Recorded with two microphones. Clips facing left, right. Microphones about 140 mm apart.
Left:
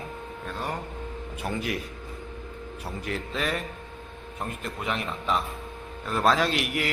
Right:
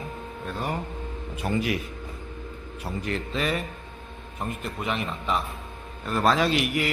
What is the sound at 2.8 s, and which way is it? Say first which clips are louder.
A man's voice: right 3 dB; centre (ahead or behind).